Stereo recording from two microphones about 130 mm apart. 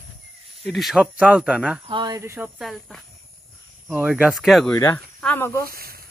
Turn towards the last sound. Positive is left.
turn(degrees=20)  # may be behind; listen again after turning